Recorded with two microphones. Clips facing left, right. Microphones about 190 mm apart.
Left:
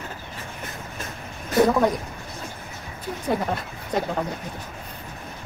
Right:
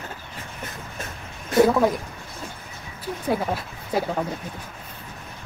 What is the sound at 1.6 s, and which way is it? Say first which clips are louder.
Speech: left 2 dB; 5° right (ahead or behind).